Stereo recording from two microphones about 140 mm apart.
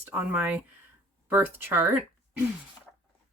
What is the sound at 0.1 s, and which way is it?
Speech, 10° right (ahead or behind).